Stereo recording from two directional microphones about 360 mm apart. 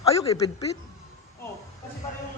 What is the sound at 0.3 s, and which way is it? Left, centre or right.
Speech, centre.